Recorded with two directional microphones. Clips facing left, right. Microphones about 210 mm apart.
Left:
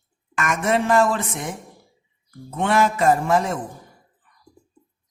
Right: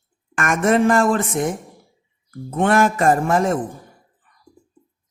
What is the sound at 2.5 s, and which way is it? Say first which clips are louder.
A man's voice: right 3 dB; 50° right (ahead or behind).